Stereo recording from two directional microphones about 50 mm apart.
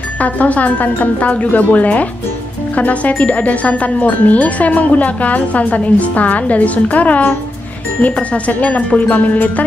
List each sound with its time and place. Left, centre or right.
0.2 s a woman's voice: left